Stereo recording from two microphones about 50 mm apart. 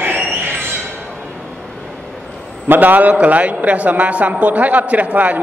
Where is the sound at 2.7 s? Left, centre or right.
Right.